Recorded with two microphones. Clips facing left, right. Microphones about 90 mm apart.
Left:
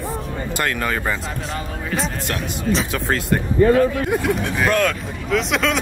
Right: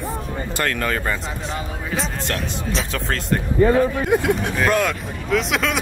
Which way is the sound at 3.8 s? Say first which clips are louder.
Even; 20° right (ahead or behind).